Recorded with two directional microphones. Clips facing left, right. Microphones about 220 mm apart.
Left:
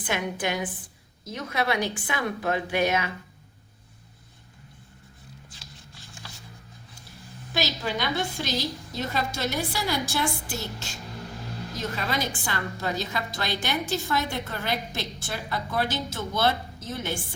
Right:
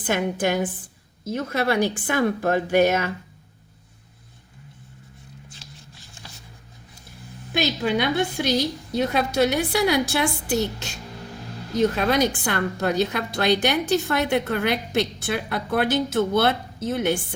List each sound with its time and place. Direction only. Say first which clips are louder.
0.0 s speech: right 6 dB; 45° right (ahead or behind)
7.5 s a woman's voice: right 6 dB; 55° right (ahead or behind)
11.9 s a woman's voice: right 9 dB; 60° right (ahead or behind)